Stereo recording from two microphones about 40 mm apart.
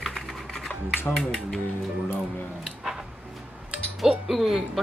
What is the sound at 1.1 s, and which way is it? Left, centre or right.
Speech, centre.